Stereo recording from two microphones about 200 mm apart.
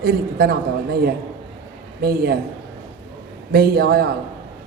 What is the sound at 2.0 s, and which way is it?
Speech, 50° right (ahead or behind).